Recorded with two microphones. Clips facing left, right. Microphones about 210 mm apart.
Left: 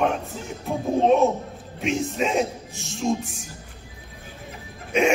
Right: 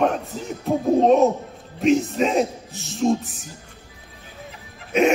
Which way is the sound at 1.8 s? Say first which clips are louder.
Right 6 dB; centre (ahead or behind).